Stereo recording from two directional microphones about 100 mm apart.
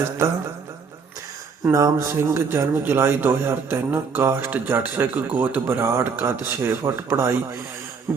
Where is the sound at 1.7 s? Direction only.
30° right (ahead or behind).